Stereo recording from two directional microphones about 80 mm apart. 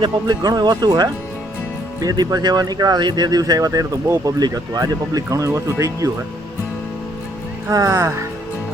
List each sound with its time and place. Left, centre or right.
0.3 s speech: right
7.7 s speech: right